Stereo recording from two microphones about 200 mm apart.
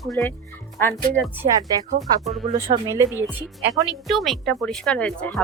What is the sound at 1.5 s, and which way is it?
A woman's voice, 20° right (ahead or behind).